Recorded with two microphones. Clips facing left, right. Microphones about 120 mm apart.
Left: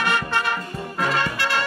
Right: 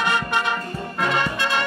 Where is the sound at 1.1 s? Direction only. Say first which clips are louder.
Right 2 dB; 20° right (ahead or behind).